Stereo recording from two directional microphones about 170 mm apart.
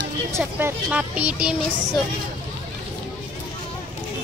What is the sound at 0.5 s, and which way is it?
Speech, 10° right (ahead or behind).